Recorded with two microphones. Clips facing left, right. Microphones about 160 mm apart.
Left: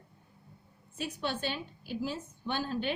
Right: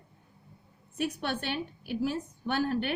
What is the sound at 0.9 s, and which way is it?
A woman's voice, 65° right (ahead or behind).